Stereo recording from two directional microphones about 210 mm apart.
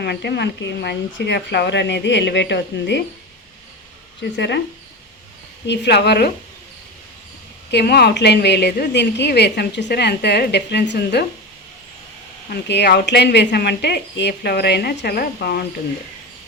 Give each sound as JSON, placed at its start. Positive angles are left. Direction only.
{"t": 0.0, "sound": "speech", "side_deg": 50}
{"t": 4.2, "sound": "speech", "side_deg": 55}
{"t": 5.6, "sound": "a woman's voice", "side_deg": 55}
{"t": 7.7, "sound": "a woman's voice", "side_deg": 50}
{"t": 12.5, "sound": "a woman's voice", "side_deg": 55}